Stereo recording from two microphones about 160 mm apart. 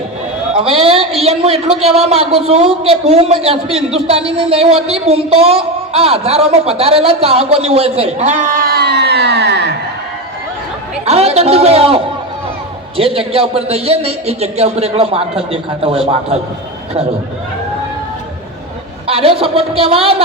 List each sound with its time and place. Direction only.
0.5 s a man's voice: 35° right (ahead or behind); by 9.7 s 90° right
11.0 s a man's voice: 40° right (ahead or behind)
19.0 s a man's voice: 35° right (ahead or behind)